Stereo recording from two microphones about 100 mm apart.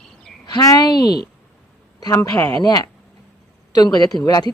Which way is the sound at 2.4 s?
40° left (ahead or behind).